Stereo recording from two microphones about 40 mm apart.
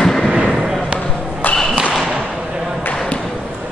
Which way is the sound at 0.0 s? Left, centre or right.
Centre.